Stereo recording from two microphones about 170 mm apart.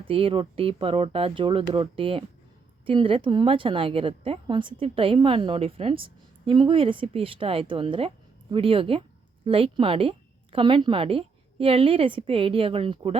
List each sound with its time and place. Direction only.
0.0 s a woman's voice: 35° right (ahead or behind)